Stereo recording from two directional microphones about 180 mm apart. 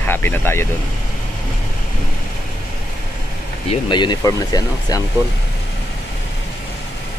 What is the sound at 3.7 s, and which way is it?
Speech, 25° left (ahead or behind).